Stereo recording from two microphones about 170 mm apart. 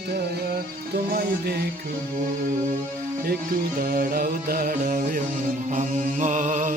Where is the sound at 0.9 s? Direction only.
65° right (ahead or behind).